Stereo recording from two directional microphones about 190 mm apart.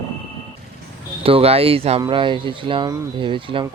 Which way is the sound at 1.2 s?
30° right (ahead or behind).